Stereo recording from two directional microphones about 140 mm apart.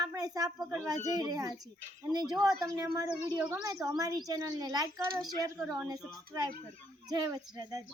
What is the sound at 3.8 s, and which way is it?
A child's voice, 25° right (ahead or behind).